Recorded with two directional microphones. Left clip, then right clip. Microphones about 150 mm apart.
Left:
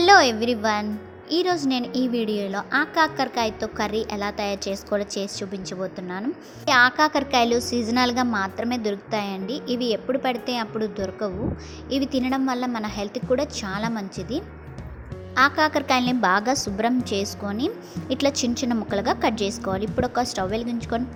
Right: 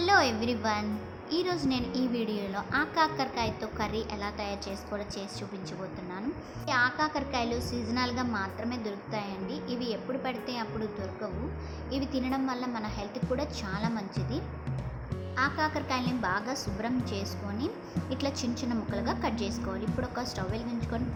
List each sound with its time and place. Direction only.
0.0 s a woman's voice: 50° left (ahead or behind)
6.7 s a woman's voice: 60° left (ahead or behind)
15.4 s a woman's voice: 60° left (ahead or behind)